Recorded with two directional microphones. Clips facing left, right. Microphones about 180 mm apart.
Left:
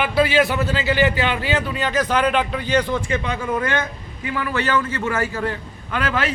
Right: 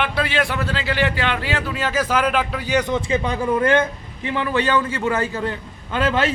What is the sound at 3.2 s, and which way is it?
Speech, 35° right (ahead or behind).